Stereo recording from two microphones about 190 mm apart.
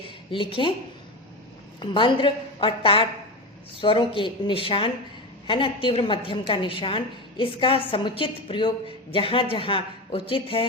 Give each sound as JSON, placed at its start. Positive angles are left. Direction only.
{"t": 0.3, "sound": "a woman's voice", "side_deg": 25}
{"t": 1.8, "sound": "a woman's voice", "side_deg": 25}